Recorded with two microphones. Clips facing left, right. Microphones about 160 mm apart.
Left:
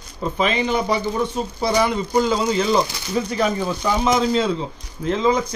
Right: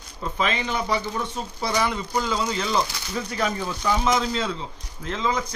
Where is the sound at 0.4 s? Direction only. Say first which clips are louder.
Left 5 dB; 20° left (ahead or behind).